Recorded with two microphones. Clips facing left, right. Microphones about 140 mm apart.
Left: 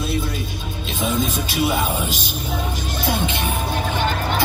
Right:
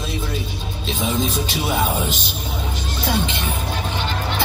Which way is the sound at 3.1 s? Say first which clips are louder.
Even; 50° left (ahead or behind).